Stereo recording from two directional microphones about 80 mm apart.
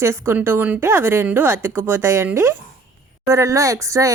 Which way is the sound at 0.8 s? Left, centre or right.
Right.